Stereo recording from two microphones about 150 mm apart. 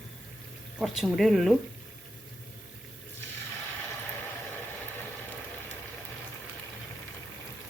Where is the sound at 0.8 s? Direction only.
Centre (ahead or behind).